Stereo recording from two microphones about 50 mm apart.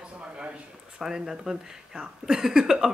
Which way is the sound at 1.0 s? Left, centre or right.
Centre.